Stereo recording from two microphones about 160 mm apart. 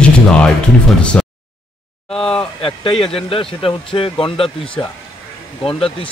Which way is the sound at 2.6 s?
35° left (ahead or behind).